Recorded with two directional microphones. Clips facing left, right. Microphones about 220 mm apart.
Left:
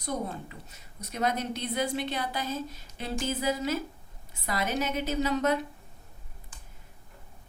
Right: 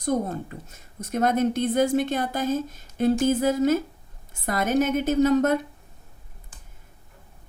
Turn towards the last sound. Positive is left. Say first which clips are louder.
# right 8 dB
turn(degrees=-50)  # may be behind; listen again after turning